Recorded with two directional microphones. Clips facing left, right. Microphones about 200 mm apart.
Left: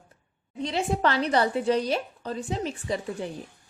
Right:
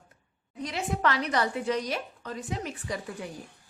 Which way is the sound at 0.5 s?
25° left (ahead or behind).